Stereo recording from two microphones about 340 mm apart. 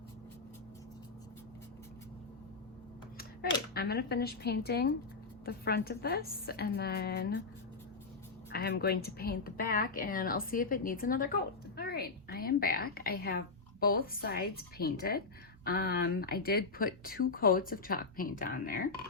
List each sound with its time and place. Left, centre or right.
3.8 s speech: left
8.5 s a woman's voice: left